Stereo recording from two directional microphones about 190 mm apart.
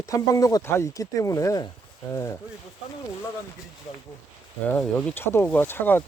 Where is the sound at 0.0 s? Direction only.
15° left (ahead or behind).